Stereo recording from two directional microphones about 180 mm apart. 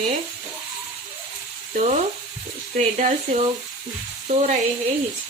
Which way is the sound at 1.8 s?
40° right (ahead or behind).